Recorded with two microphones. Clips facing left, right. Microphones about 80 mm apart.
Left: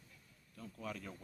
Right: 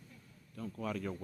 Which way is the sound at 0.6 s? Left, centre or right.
Right.